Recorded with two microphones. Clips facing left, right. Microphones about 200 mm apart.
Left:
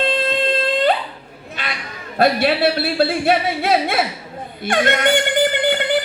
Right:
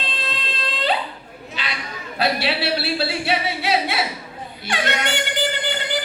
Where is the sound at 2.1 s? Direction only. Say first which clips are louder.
Left 6 dB; 50° left (ahead or behind).